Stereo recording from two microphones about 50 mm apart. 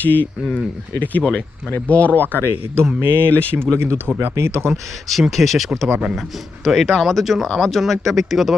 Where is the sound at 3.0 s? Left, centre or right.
Right.